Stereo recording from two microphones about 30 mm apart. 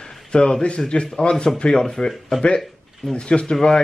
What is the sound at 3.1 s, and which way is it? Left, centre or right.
Speech, left.